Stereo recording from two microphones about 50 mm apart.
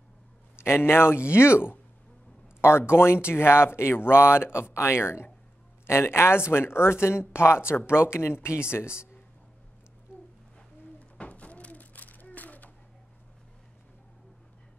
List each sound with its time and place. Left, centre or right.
0.6 s speech: left
2.9 s speech: left
11.0 s a sound: left